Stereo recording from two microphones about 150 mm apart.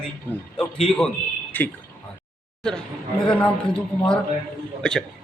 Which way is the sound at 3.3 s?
5° left (ahead or behind).